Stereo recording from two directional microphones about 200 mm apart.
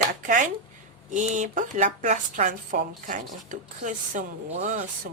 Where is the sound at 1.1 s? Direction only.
40° right (ahead or behind).